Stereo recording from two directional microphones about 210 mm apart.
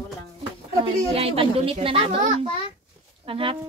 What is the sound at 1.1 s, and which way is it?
A woman's voice, 25° right (ahead or behind).